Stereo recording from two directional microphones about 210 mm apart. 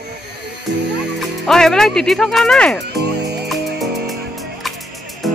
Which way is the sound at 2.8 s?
50° right (ahead or behind).